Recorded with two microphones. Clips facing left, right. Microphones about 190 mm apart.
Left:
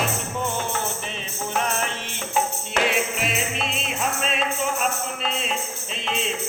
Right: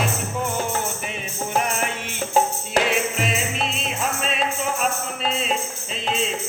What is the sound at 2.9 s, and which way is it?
Music, centre (ahead or behind).